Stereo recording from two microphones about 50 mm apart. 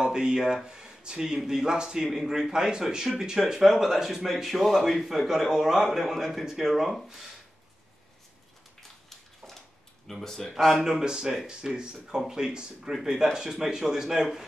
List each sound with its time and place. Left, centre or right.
0.0 s a man's voice: centre
10.2 s speech: centre
10.8 s speech: centre